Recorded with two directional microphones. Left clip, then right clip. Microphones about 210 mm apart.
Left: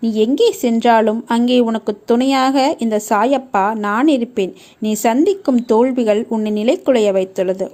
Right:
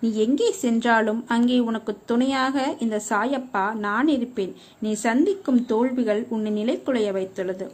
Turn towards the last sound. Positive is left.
turn(degrees=30)  # may be behind; listen again after turning